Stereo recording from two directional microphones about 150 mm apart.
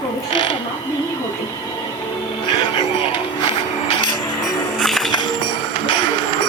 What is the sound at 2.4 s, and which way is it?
Music, 35° left (ahead or behind).